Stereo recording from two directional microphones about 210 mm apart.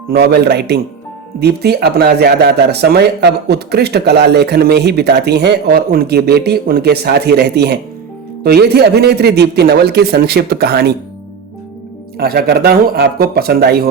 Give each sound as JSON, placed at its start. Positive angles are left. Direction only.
{"t": 0.1, "sound": "speech", "side_deg": -50}
{"t": 12.1, "sound": "speech", "side_deg": -50}